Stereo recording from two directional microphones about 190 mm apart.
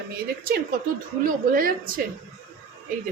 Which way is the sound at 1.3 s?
45° right (ahead or behind).